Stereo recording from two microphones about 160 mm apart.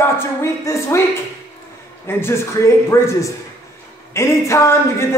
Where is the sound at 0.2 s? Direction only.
15° left (ahead or behind).